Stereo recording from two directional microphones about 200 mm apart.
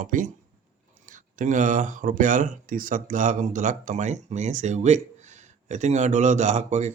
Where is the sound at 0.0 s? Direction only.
40° right (ahead or behind).